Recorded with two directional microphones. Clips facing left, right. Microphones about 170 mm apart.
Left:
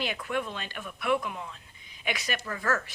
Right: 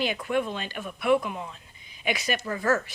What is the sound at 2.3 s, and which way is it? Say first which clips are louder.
Speech: right 5 dB; 20° right (ahead or behind).